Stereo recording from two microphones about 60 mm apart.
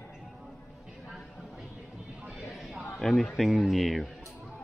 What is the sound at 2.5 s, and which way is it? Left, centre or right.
Chatter, centre.